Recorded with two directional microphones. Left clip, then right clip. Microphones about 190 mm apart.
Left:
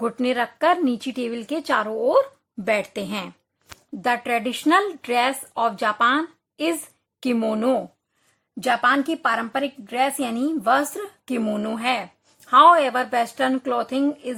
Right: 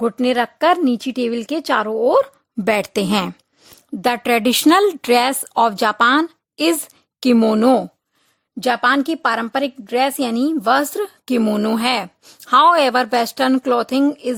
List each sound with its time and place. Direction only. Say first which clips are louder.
0.0 s a woman's voice: right 5 dB; 45° right (ahead or behind)